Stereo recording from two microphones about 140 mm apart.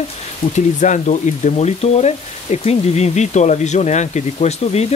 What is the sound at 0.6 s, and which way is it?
Speech, 60° left (ahead or behind).